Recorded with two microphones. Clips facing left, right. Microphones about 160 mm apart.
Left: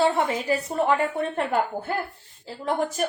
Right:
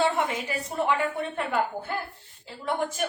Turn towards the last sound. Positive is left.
turn(degrees=35)  # may be behind; listen again after turning